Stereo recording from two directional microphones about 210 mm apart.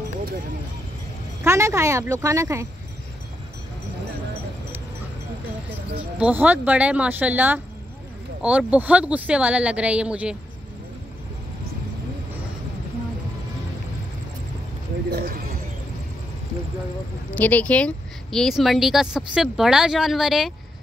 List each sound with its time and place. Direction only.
1.4 s speech: 15° right (ahead or behind)
6.1 s speech: 5° right (ahead or behind)
15.0 s speech: 45° right (ahead or behind)
17.3 s speech: 5° left (ahead or behind)